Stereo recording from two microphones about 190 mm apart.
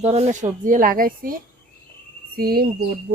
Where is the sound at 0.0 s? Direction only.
35° right (ahead or behind).